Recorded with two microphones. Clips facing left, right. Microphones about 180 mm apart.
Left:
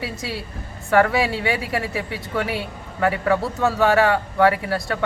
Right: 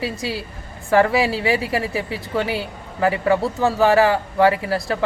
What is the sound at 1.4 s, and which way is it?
Speech, 25° right (ahead or behind).